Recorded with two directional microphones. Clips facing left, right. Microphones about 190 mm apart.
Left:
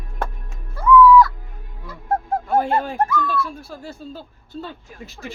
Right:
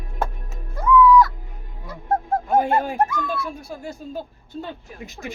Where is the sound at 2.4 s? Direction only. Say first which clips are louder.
Even; 15° right (ahead or behind).